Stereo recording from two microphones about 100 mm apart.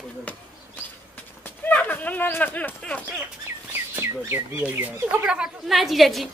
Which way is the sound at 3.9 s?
25° right (ahead or behind).